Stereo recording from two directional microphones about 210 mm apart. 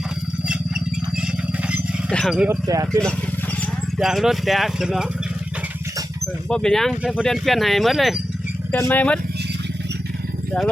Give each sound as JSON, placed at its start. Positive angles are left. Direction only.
{"t": 1.6, "sound": "dog", "side_deg": -5}
{"t": 2.1, "sound": "speech", "side_deg": 0}
{"t": 2.6, "sound": "speech", "side_deg": -15}
{"t": 3.9, "sound": "speech", "side_deg": 0}
{"t": 6.5, "sound": "speech", "side_deg": 5}